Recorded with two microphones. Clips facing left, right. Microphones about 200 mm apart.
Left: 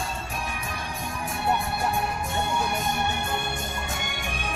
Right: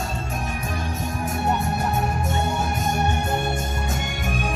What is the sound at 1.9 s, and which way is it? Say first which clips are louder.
Music: right 4 dB; 45° right (ahead or behind).